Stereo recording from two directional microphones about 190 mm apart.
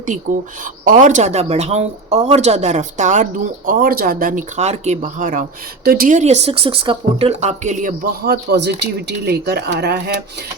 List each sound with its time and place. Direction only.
0.0 s speech: 40° right (ahead or behind); by 10.2 s 60° right (ahead or behind)